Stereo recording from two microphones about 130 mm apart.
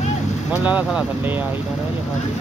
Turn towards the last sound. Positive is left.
turn(degrees=-10)  # may be behind; listen again after turning